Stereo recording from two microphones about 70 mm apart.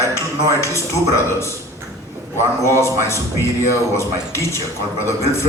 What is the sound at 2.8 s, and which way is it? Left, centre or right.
A man's voice, left.